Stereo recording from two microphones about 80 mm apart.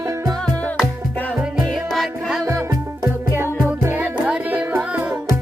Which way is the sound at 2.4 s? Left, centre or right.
Right.